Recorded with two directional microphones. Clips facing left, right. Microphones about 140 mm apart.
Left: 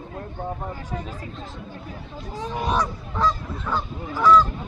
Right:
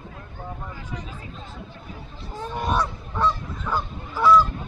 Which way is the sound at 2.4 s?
Centre (ahead or behind).